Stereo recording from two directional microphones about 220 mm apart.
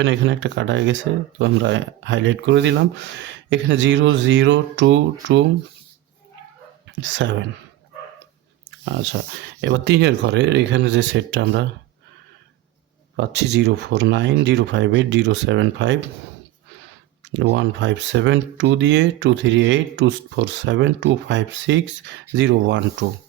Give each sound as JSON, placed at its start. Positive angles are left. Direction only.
{"t": 0.0, "sound": "speech", "side_deg": -55}
{"t": 7.0, "sound": "speech", "side_deg": -55}
{"t": 8.8, "sound": "speech", "side_deg": -55}
{"t": 13.1, "sound": "speech", "side_deg": -50}
{"t": 17.2, "sound": "speech", "side_deg": -55}